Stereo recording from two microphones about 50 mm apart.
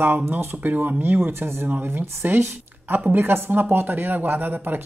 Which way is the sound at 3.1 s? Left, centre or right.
Right.